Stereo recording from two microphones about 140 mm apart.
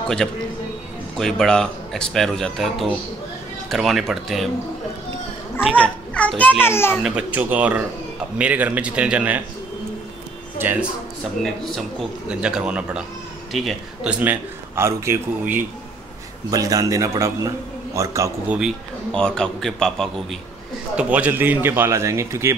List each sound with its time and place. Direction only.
0.2 s speech: centre (ahead or behind)
5.8 s a child's voice: 10° left (ahead or behind)
7.0 s a man's voice: 5° right (ahead or behind)
10.6 s a man's voice: 15° right (ahead or behind)
11.4 s a man's voice: centre (ahead or behind); by 15.1 s 20° right (ahead or behind)
16.4 s a man's voice: 25° right (ahead or behind)
18.5 s speech: 5° right (ahead or behind)
20.9 s a man's voice: 10° right (ahead or behind)